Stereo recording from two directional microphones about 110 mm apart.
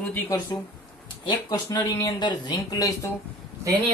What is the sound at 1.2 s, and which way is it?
Speech, 40° left (ahead or behind).